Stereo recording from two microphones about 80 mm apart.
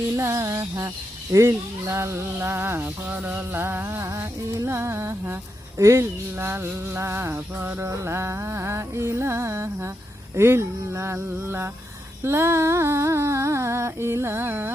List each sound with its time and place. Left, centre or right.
0.2 s speech: right